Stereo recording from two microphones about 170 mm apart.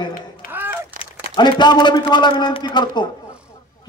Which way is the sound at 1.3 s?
25° left (ahead or behind).